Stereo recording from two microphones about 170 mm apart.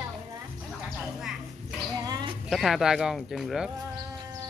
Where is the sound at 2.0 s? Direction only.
25° right (ahead or behind).